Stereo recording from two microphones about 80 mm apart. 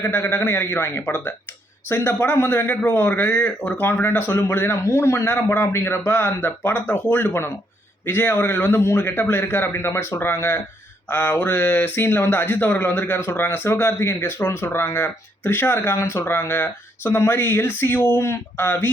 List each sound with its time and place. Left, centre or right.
0.0 s speech: left